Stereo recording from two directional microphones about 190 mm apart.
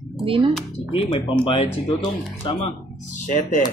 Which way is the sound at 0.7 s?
30° left (ahead or behind).